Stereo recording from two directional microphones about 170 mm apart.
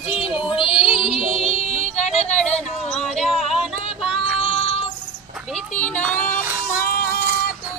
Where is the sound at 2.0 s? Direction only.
40° left (ahead or behind).